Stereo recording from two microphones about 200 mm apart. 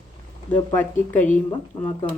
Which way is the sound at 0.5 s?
10° left (ahead or behind).